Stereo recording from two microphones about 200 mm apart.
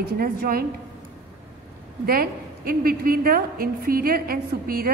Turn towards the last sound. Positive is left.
turn(degrees=-45)  # may be behind; listen again after turning